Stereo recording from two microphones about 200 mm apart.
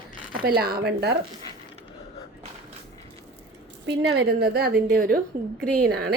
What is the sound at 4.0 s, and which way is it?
A woman's voice, 55° right (ahead or behind).